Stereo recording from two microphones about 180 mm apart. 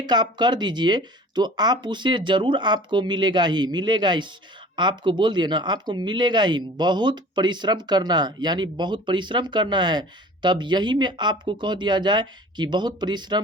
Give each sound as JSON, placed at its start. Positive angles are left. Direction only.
{"t": 0.0, "sound": "speech", "side_deg": -25}